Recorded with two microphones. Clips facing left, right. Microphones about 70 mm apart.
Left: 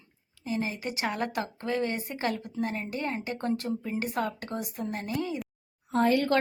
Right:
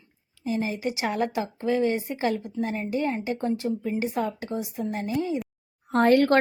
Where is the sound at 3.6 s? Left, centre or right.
Centre.